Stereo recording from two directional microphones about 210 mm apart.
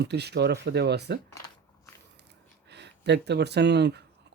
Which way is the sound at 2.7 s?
55° right (ahead or behind).